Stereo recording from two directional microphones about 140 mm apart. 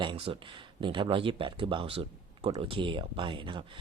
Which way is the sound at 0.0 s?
35° right (ahead or behind).